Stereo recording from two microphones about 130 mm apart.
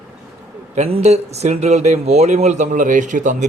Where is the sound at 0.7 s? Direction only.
55° right (ahead or behind).